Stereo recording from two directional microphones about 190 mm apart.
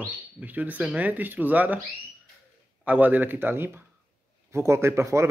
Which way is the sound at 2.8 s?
10° right (ahead or behind).